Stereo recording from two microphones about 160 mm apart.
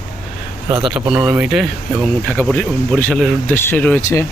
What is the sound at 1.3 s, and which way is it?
Speech, 5° right (ahead or behind).